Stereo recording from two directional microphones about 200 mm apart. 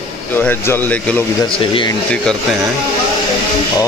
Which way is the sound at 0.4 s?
10° left (ahead or behind).